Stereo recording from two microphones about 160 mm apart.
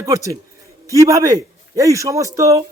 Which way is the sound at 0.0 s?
20° right (ahead or behind).